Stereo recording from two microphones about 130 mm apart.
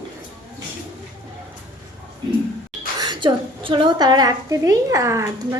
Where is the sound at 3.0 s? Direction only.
35° right (ahead or behind).